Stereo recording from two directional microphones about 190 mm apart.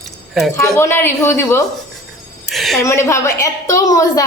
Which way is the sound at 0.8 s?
15° left (ahead or behind).